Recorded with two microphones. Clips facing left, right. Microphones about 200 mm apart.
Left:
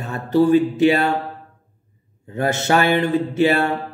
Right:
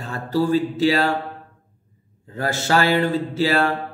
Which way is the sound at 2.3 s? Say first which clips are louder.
Left 3 dB; 20° left (ahead or behind).